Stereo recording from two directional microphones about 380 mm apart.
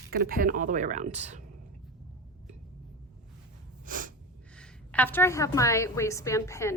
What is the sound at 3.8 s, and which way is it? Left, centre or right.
Sneeze, right.